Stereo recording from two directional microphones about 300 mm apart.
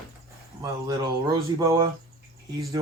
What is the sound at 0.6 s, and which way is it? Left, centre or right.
Speech, centre.